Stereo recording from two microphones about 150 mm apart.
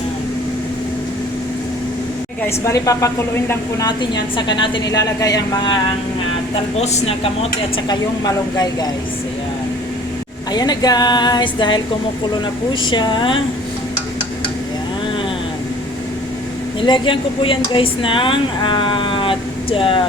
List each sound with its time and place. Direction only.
2.6 s a woman's voice: 20° left (ahead or behind)
3.8 s a woman's voice: 30° left (ahead or behind)
6.7 s speech: 45° left (ahead or behind)
7.9 s a woman's voice: 25° left (ahead or behind)
10.5 s a woman's voice: 25° left (ahead or behind)
12.8 s speech: 30° left (ahead or behind)
16.8 s speech: 35° left (ahead or behind)